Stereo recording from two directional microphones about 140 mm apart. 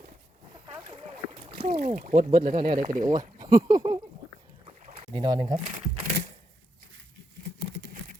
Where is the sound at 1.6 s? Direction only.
60° right (ahead or behind).